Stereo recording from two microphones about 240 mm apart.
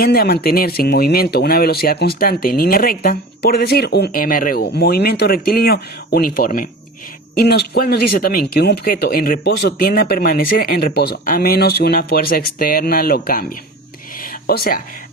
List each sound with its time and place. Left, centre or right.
0.0 s speech: left
14.2 s whispering: left